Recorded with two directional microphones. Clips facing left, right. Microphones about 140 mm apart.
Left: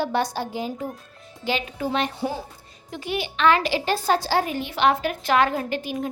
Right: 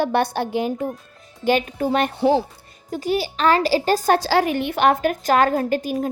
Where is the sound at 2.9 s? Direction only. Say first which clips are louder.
Right 6 dB; 40° right (ahead or behind).